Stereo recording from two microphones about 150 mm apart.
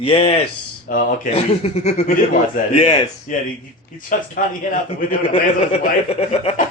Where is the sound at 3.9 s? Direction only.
65° left (ahead or behind).